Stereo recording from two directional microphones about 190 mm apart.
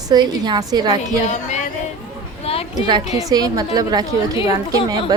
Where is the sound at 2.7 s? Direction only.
20° right (ahead or behind).